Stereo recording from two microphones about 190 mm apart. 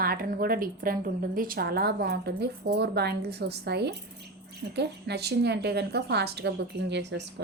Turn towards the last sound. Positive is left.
turn(degrees=-65)  # may be behind; listen again after turning